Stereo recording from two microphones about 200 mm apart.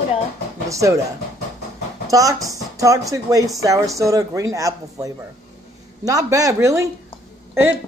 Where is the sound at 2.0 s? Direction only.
15° right (ahead or behind).